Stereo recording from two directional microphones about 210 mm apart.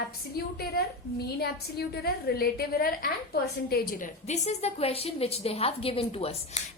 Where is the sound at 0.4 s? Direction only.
45° left (ahead or behind).